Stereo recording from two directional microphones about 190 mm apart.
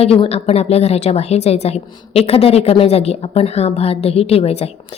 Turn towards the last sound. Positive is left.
turn(degrees=30)  # may be behind; listen again after turning